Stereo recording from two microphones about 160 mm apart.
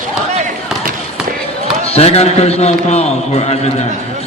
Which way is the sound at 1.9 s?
40° left (ahead or behind).